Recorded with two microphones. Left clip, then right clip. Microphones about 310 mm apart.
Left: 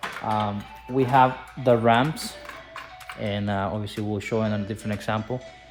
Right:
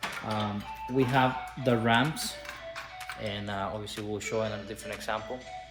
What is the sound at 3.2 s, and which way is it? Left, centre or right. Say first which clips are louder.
Speech: left 7 dB; left.